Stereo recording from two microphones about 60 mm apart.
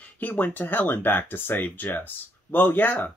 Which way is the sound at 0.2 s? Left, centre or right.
Left.